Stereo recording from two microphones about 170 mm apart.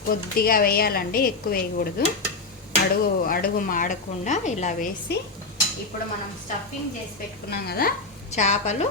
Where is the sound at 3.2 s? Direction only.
60° left (ahead or behind).